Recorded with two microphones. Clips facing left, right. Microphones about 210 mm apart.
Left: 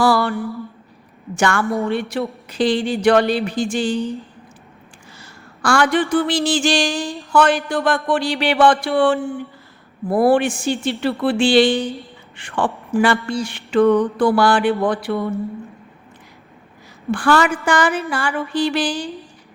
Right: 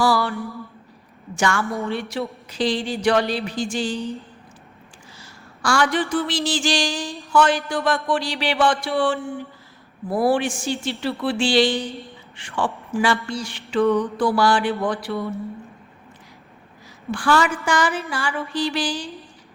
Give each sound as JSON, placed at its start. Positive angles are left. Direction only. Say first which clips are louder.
{"t": 0.0, "sound": "mantra", "louder": "left 4 dB", "side_deg": 55}
{"t": 1.4, "sound": "a man's voice", "louder": "left 4 dB", "side_deg": 60}
{"t": 5.1, "sound": "a sound", "louder": "left 2 dB", "side_deg": 60}
{"t": 7.3, "sound": "a man's voice", "louder": "left 3 dB", "side_deg": 55}
{"t": 17.1, "sound": "a man's voice", "louder": "left 3 dB", "side_deg": 55}